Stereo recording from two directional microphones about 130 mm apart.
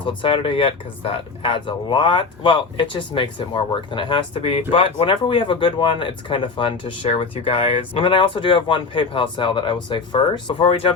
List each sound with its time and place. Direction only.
0.0 s speech: 40° left (ahead or behind)